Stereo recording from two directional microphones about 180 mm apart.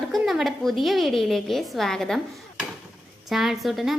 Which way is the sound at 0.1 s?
Centre (ahead or behind).